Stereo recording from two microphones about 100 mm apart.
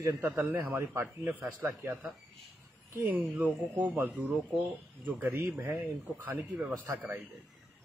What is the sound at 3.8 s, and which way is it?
Speech, 20° right (ahead or behind).